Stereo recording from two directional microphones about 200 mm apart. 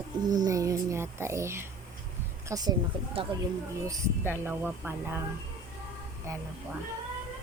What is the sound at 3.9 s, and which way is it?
Speech, 10° right (ahead or behind).